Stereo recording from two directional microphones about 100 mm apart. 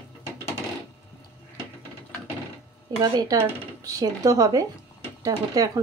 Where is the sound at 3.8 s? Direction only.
35° right (ahead or behind).